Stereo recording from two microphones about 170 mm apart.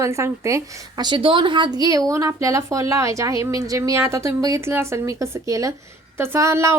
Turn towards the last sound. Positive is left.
turn(degrees=-15)  # may be behind; listen again after turning